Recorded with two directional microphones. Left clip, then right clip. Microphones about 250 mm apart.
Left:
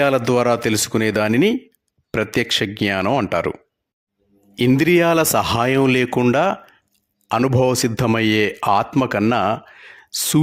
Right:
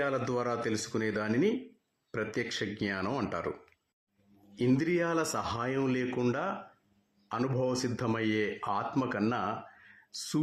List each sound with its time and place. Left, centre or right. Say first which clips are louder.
0.0 s speech: left 15 dB; left
4.5 s speech: left 14 dB; left